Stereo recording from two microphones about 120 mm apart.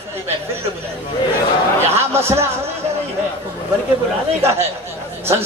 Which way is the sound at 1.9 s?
20° right (ahead or behind).